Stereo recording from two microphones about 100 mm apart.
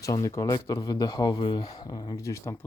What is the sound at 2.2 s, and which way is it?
Speech, 30° left (ahead or behind).